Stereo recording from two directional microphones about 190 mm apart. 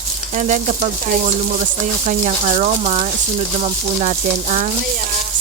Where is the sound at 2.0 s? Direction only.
35° right (ahead or behind).